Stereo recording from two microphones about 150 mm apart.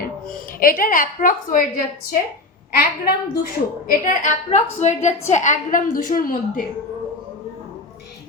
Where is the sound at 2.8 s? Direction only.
90° left.